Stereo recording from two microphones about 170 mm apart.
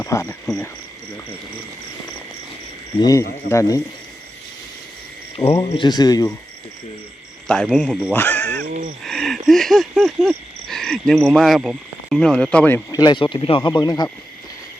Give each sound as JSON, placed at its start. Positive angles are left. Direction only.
{"t": 0.0, "sound": "cricket", "side_deg": 15}
{"t": 0.4, "sound": "speech", "side_deg": 5}
{"t": 3.0, "sound": "speech", "side_deg": 20}
{"t": 5.6, "sound": "speech", "side_deg": 30}
{"t": 7.4, "sound": "speech", "side_deg": 5}
{"t": 9.0, "sound": "a sound", "side_deg": 0}
{"t": 9.5, "sound": "speech", "side_deg": 0}
{"t": 12.9, "sound": "speech", "side_deg": 25}